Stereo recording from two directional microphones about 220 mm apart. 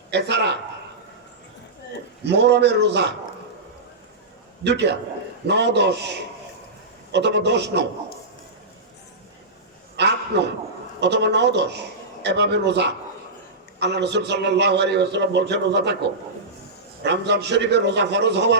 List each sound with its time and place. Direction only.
0.1 s a man's voice: 50° right (ahead or behind)
2.2 s a man's voice: 50° right (ahead or behind)
4.6 s a man's voice: 50° right (ahead or behind)
10.0 s a sound: 50° right (ahead or behind)
11.0 s a man's voice: 50° right (ahead or behind)
17.0 s a man's voice: 50° right (ahead or behind)